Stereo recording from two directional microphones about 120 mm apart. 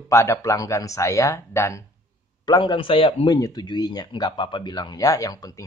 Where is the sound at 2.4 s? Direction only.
35° left (ahead or behind).